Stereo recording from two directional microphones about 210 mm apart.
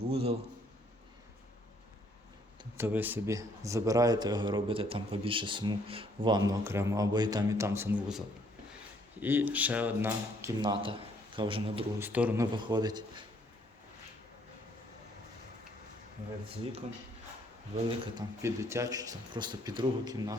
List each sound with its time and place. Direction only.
0.1 s speech: 30° right (ahead or behind)
2.7 s a man's voice: 10° right (ahead or behind)
9.2 s a man's voice: 10° right (ahead or behind)
10.6 s a man's voice: 25° right (ahead or behind)
11.9 s a man's voice: 10° right (ahead or behind)
12.5 s speech: 20° right (ahead or behind)
17.8 s speech: 20° right (ahead or behind)